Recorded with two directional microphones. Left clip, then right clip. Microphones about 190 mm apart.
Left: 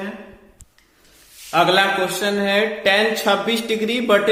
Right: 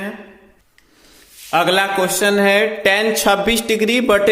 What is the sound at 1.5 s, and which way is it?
A man's voice, 45° right (ahead or behind).